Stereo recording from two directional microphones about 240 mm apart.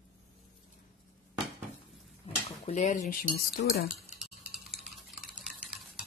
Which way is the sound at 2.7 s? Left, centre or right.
Left.